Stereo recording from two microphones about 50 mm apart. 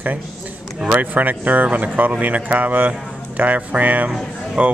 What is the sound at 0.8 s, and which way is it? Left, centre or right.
Speech, right.